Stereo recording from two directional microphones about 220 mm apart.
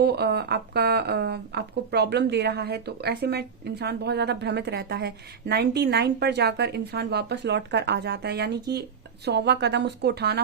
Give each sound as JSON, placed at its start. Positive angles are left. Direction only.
{"t": 0.0, "sound": "a woman's voice", "side_deg": -45}